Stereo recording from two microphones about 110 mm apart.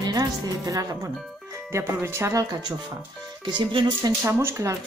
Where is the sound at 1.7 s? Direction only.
20° right (ahead or behind).